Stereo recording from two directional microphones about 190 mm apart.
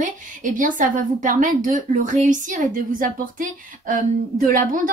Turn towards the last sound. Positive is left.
turn(degrees=-45)  # may be behind; listen again after turning